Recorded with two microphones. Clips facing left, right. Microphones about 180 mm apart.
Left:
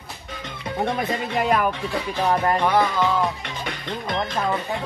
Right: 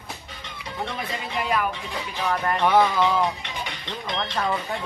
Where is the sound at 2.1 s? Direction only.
35° left (ahead or behind).